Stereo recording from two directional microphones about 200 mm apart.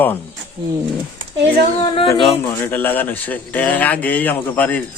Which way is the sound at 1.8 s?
25° left (ahead or behind).